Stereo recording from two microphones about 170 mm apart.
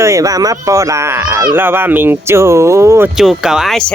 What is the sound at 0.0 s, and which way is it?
Speech, 20° right (ahead or behind).